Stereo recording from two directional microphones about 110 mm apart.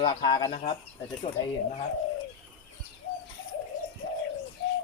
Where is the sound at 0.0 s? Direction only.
40° left (ahead or behind).